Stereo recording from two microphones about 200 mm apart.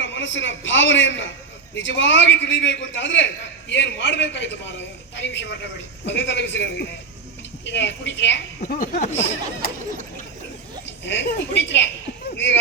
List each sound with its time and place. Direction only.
0.0 s a man's voice: 65° left (ahead or behind)
8.6 s speech: 40° left (ahead or behind)
11.0 s a man's voice: 65° left (ahead or behind)